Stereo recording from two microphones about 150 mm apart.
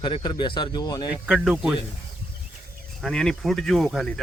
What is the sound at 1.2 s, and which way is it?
Speech, 5° right (ahead or behind).